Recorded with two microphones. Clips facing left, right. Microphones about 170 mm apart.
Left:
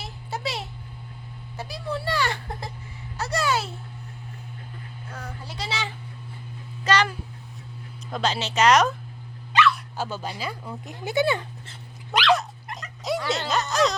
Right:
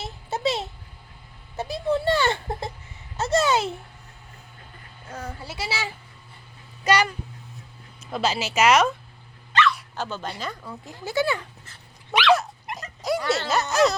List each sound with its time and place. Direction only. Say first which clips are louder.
0.0 s a sound: right 6 dB; 25° right (ahead or behind)
1.5 s speech: right 7 dB; 25° right (ahead or behind)
5.4 s a child's voice: even; 5° right (ahead or behind)
8.1 s a woman's voice: right 1 dB; 5° right (ahead or behind)
9.9 s speech: even; 10° left (ahead or behind)
12.7 s dog: right 2 dB; centre (ahead or behind)
13.5 s music: right 2 dB; 5° right (ahead or behind)